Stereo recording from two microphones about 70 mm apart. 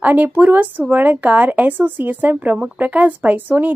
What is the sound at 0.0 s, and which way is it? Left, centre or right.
Speech, right.